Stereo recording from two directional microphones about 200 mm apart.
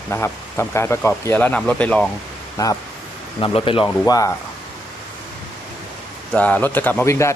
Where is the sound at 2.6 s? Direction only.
20° left (ahead or behind).